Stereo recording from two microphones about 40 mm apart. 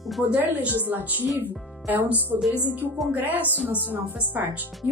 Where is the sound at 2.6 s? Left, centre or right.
Right.